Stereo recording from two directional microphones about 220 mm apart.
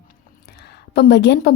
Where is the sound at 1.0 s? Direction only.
50° left (ahead or behind).